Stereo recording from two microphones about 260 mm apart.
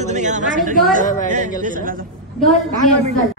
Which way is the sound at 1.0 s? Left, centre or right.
Left.